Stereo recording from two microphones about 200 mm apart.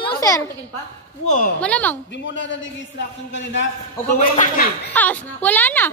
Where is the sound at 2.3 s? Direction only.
65° left (ahead or behind).